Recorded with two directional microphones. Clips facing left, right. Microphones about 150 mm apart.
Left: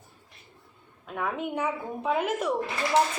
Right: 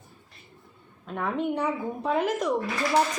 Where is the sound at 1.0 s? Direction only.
5° left (ahead or behind).